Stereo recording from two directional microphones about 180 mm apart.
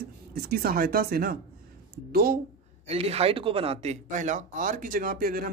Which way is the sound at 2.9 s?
35° right (ahead or behind).